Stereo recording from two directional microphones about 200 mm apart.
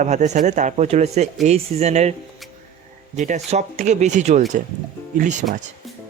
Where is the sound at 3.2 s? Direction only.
35° right (ahead or behind).